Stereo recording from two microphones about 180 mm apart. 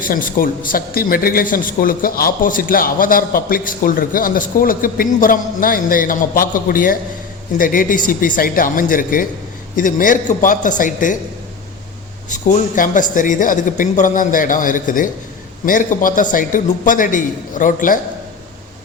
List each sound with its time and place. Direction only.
0.0 s a man's voice: 50° left (ahead or behind)
12.3 s a man's voice: 45° left (ahead or behind)